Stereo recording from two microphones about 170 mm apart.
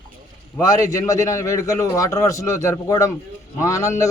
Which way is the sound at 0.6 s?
20° left (ahead or behind).